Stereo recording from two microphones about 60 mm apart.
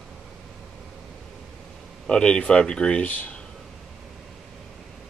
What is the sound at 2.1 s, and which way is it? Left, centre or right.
Speech, centre.